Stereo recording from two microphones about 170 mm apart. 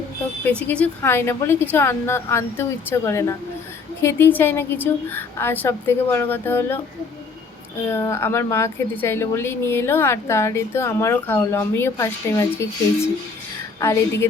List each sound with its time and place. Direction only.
0.4 s a woman's voice: 10° left (ahead or behind)
7.9 s a woman's voice: 15° left (ahead or behind)